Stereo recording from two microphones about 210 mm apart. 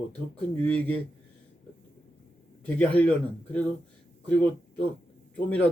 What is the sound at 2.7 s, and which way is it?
Speech, 5° left (ahead or behind).